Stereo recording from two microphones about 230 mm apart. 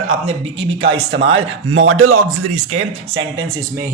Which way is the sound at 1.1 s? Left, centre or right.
Right.